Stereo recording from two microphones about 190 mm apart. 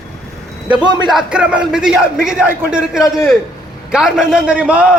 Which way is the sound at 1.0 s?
5° right (ahead or behind).